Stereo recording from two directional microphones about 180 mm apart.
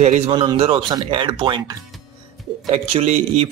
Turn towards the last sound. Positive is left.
turn(degrees=-35)  # may be behind; listen again after turning